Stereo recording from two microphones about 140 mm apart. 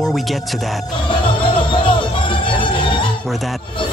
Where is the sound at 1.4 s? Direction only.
35° left (ahead or behind).